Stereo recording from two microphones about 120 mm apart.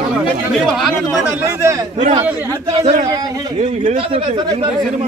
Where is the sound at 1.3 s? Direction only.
25° right (ahead or behind).